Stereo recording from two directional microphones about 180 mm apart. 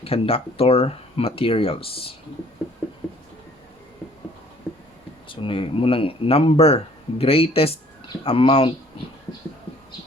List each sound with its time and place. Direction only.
0.0 s speech: 30° left (ahead or behind)
5.3 s speech: 30° left (ahead or behind)